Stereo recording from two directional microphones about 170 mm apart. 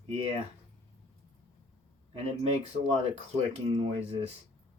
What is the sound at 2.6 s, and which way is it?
Speech, 40° right (ahead or behind).